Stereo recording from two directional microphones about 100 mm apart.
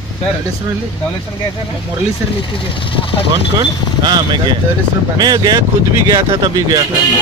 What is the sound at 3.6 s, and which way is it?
Speech, 45° right (ahead or behind).